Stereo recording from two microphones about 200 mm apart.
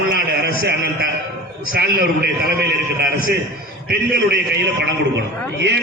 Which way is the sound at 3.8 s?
55° right (ahead or behind).